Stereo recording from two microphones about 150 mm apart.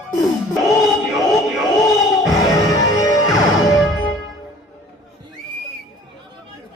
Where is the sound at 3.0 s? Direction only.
25° left (ahead or behind).